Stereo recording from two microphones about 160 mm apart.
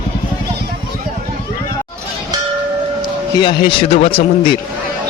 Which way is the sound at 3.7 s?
35° left (ahead or behind).